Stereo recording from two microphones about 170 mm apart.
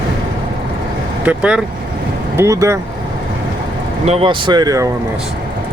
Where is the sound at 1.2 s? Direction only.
10° right (ahead or behind).